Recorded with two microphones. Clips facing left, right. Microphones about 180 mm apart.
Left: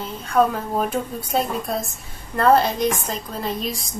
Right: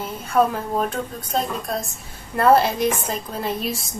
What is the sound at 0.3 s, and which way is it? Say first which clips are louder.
Speech: even; centre (ahead or behind).